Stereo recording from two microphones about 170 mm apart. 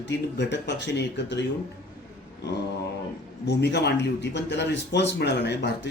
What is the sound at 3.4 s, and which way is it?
Speech, 85° left.